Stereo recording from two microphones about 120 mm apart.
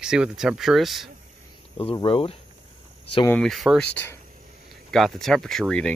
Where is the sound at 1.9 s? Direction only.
45° left (ahead or behind).